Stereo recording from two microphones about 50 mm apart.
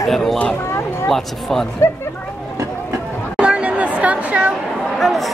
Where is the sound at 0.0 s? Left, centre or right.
Centre.